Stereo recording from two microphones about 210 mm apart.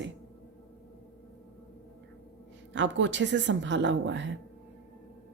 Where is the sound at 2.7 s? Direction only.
60° right (ahead or behind).